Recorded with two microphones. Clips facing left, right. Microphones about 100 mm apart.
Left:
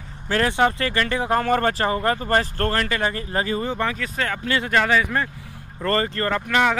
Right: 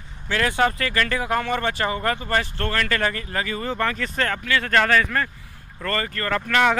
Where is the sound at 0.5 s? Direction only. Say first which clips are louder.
Even; 25° left (ahead or behind).